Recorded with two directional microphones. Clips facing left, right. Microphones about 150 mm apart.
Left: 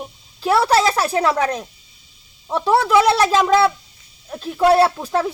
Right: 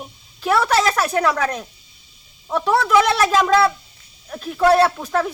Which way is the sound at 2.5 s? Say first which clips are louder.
Left 1 dB; 25° left (ahead or behind).